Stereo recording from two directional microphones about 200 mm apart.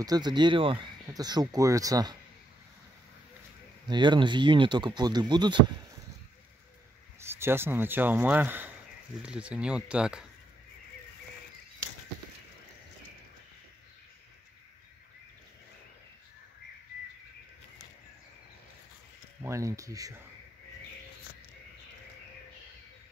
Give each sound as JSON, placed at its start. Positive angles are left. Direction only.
{"t": 0.0, "sound": "speech", "side_deg": -20}
{"t": 3.8, "sound": "speech", "side_deg": -20}
{"t": 7.2, "sound": "speech", "side_deg": -10}
{"t": 19.4, "sound": "speech", "side_deg": -15}